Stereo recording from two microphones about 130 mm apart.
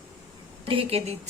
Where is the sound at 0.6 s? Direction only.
45° right (ahead or behind).